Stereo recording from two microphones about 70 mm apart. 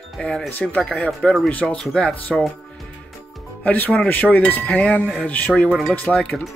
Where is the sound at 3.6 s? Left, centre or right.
Left.